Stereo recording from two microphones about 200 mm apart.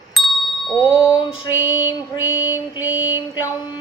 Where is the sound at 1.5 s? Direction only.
10° right (ahead or behind).